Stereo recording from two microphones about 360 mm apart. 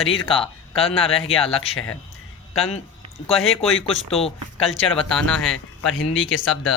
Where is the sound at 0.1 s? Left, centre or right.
Centre.